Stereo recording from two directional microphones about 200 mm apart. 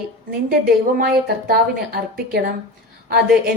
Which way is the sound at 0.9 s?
50° right (ahead or behind).